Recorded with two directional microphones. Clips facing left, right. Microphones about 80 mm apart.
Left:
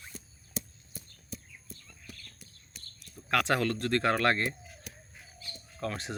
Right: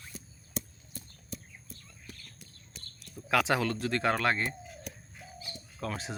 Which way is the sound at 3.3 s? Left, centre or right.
Centre.